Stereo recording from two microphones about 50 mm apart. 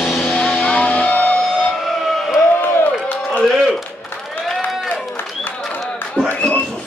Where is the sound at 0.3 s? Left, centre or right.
Left.